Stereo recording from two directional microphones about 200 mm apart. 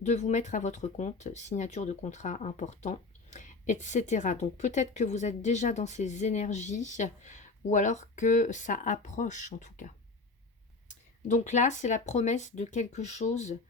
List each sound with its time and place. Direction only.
0.0 s speech: 35° left (ahead or behind)